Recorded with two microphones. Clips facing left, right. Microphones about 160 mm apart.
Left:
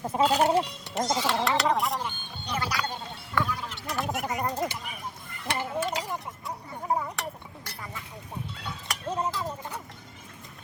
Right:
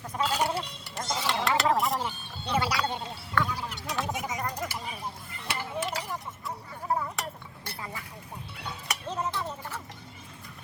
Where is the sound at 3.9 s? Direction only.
Centre (ahead or behind).